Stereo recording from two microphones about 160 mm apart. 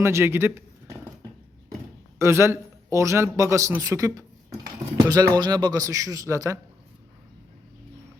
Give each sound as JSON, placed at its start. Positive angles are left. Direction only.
{"t": 0.0, "sound": "speech", "side_deg": -15}
{"t": 2.1, "sound": "a man's voice", "side_deg": -15}